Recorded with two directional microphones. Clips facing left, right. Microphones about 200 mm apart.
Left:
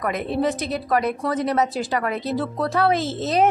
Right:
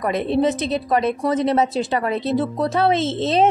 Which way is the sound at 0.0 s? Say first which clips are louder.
Right 4 dB; 25° right (ahead or behind).